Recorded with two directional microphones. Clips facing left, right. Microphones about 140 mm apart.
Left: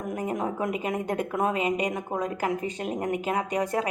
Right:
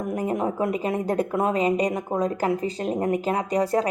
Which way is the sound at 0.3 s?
30° right (ahead or behind).